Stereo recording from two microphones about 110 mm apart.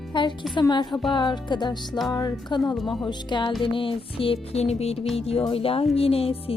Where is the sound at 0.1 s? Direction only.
45° left (ahead or behind).